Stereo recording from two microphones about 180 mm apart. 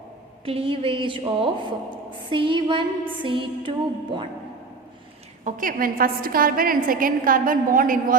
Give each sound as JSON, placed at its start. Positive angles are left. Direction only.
{"t": 0.4, "sound": "a woman's voice", "side_deg": -30}
{"t": 2.3, "sound": "music", "side_deg": -30}
{"t": 5.5, "sound": "a woman's voice", "side_deg": -45}